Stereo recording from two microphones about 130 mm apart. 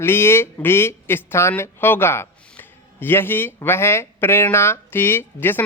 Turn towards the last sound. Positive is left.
turn(degrees=15)  # may be behind; listen again after turning